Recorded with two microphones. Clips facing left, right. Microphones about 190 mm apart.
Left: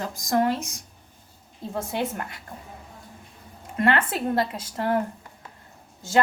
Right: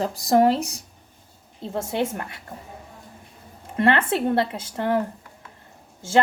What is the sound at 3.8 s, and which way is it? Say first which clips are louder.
A woman's voice: right 3 dB; 30° right (ahead or behind).